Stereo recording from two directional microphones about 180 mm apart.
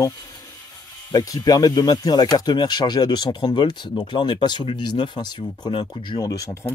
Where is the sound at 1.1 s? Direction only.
20° left (ahead or behind).